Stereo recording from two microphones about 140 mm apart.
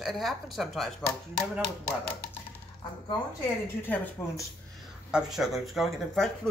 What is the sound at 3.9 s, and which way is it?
Speech, 15° left (ahead or behind).